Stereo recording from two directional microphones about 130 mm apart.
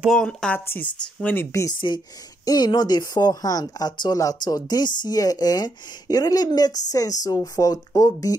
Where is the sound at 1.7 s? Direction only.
40° left (ahead or behind).